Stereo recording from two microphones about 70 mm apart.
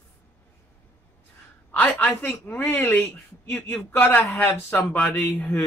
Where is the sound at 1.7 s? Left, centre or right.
Left.